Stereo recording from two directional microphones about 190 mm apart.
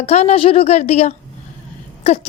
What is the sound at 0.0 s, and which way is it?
Speech, 35° left (ahead or behind).